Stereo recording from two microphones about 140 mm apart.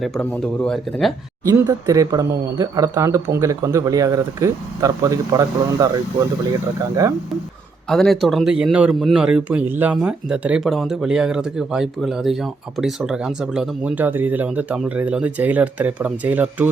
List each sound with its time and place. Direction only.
0.2 s a man's voice: 10° left (ahead or behind)
1.5 s speech: 25° right (ahead or behind)
7.9 s a man's voice: centre (ahead or behind)